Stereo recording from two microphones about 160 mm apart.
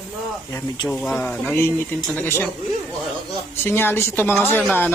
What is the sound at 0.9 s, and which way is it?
Speech, 5° left (ahead or behind).